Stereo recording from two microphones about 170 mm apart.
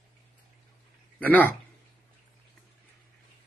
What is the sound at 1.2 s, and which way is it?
Speech, 10° left (ahead or behind).